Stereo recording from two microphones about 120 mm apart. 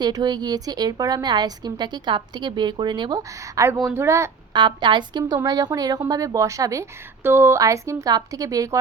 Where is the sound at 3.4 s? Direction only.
25° right (ahead or behind).